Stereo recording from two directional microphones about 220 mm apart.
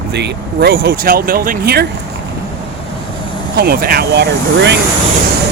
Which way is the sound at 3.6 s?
45° right (ahead or behind).